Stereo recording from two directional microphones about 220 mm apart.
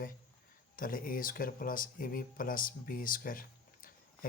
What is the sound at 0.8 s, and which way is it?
A man's voice, 40° left (ahead or behind).